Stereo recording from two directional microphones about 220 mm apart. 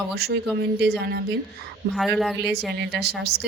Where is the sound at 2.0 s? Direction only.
Centre (ahead or behind).